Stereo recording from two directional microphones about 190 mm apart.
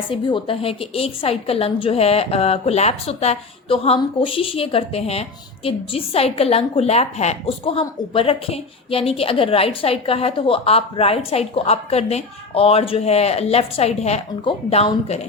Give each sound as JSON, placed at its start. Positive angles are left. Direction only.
{"t": 0.1, "sound": "a woman's voice", "side_deg": 25}